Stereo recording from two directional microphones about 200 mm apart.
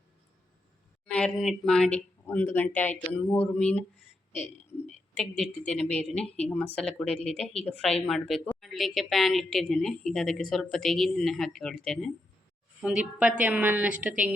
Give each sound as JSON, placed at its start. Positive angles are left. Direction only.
{"t": 1.0, "sound": "speech", "side_deg": 5}
{"t": 4.3, "sound": "speech", "side_deg": 35}
{"t": 5.4, "sound": "a woman's voice", "side_deg": 5}